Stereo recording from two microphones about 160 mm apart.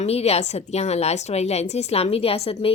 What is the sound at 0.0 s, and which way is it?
A woman's voice, 40° left (ahead or behind).